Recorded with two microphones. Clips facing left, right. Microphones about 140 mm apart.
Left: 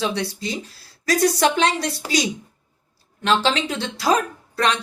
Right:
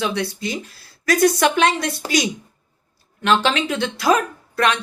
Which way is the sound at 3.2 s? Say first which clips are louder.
Right 2 dB; 30° left (ahead or behind).